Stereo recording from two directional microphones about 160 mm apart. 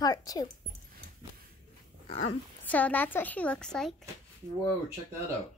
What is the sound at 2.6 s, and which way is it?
A woman's voice, 10° left (ahead or behind).